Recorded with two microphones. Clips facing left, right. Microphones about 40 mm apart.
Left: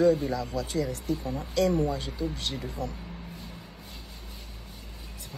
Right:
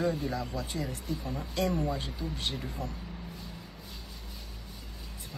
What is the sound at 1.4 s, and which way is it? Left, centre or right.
Speech, right.